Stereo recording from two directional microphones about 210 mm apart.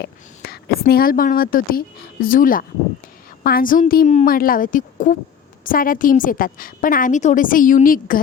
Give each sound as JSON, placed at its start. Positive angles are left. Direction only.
{"t": 0.0, "sound": "a woman's voice", "side_deg": 50}